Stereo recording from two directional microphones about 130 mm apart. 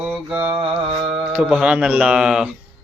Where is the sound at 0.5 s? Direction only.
45° right (ahead or behind).